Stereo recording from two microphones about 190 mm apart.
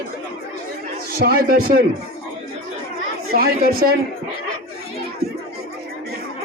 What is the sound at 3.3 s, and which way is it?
Speech, 50° right (ahead or behind).